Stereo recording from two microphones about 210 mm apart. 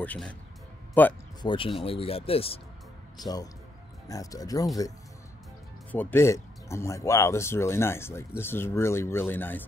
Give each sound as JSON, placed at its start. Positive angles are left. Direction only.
{"t": 0.0, "sound": "speech", "side_deg": 5}
{"t": 1.4, "sound": "speech", "side_deg": 25}
{"t": 4.1, "sound": "speech", "side_deg": 15}
{"t": 5.9, "sound": "speech", "side_deg": 10}